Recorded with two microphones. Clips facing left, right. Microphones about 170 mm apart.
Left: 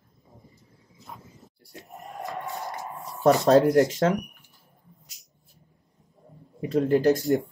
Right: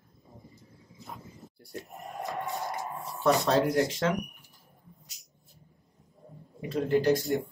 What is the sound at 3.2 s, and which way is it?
Speech, 35° left (ahead or behind).